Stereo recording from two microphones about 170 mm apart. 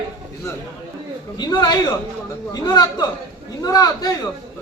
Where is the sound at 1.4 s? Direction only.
25° left (ahead or behind).